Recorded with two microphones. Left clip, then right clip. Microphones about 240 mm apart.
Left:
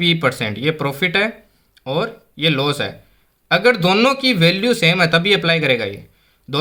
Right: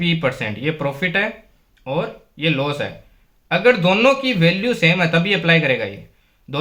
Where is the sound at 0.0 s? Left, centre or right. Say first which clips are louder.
Left 3 dB; left.